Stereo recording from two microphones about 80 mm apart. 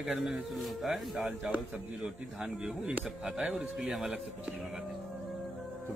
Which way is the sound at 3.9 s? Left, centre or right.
Centre.